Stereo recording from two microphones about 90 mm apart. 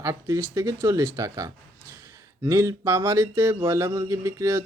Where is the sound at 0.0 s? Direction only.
35° right (ahead or behind).